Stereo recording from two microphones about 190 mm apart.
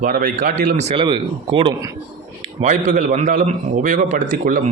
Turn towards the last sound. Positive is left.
turn(degrees=-45)  # may be behind; listen again after turning